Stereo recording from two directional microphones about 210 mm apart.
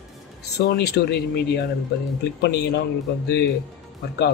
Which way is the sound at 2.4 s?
55° left (ahead or behind).